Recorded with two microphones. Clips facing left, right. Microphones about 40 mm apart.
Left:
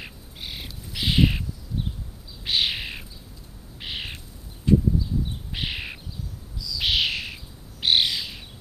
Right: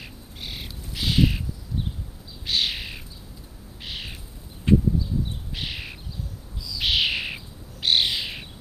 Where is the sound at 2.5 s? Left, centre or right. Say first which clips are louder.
Left 1 dB; centre.